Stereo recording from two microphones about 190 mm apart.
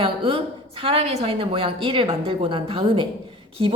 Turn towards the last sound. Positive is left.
turn(degrees=-30)  # may be behind; listen again after turning